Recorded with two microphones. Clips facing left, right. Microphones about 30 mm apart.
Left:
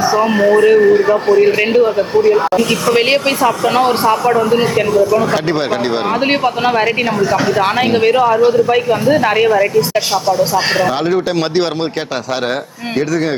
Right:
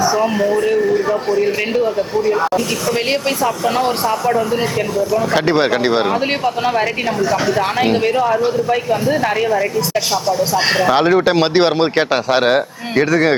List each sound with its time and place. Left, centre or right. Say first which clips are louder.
0.2 s a man's voice: left 5 dB; left
2.6 s a man's voice: left 6 dB; left
5.3 s speech: right 1 dB; centre
6.1 s speech: left 3 dB; left
10.8 s speech: right 2 dB; centre
13.0 s speech: right 3 dB; right